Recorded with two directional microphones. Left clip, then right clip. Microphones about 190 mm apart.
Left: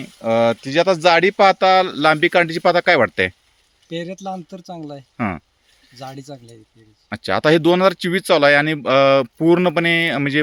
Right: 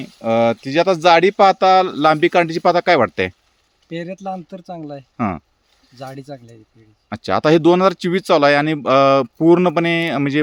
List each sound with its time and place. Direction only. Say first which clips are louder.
0.0 s speech: even; 5° right (ahead or behind)
6.0 s speech: right 2 dB; 20° right (ahead or behind)
7.1 s speech: right 1 dB; 10° right (ahead or behind)